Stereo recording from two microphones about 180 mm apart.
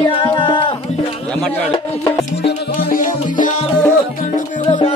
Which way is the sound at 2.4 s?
55° left (ahead or behind).